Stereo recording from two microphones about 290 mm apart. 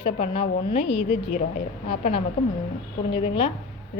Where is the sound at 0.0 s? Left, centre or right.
Left.